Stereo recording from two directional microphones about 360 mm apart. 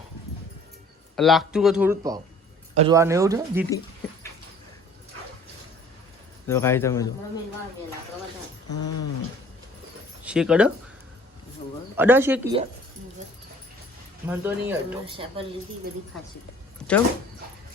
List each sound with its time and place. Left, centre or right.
1.1 s speech: centre
6.5 s speech: centre
8.7 s a sound: left
10.2 s speech: centre
11.9 s speech: centre
14.3 s speech: centre